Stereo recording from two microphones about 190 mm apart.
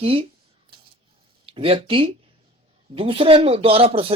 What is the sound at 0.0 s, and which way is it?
Speech, 30° right (ahead or behind).